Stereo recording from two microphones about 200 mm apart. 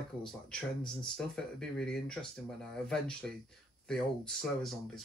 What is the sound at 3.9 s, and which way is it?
Speech, centre (ahead or behind).